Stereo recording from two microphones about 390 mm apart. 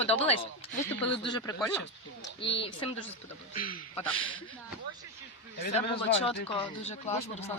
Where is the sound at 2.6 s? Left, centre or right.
Centre.